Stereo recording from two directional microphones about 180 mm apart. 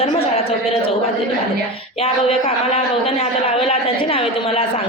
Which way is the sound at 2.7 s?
30° left (ahead or behind).